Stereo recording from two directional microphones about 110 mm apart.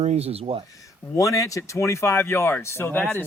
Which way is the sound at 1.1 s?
30° left (ahead or behind).